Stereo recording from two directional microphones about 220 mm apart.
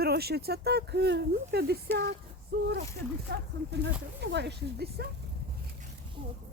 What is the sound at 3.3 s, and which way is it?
Speech, 55° right (ahead or behind).